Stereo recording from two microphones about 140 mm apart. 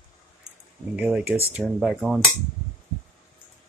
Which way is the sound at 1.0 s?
10° right (ahead or behind).